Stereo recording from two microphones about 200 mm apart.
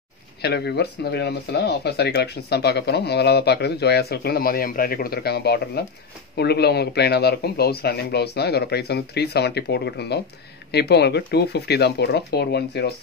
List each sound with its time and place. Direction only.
0.4 s speech: 55° left (ahead or behind)